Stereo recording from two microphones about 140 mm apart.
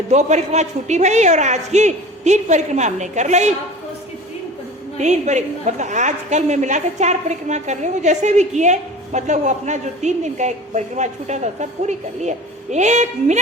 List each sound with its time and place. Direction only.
0.1 s a woman's voice: 55° right (ahead or behind)
4.9 s a woman's voice: 55° right (ahead or behind)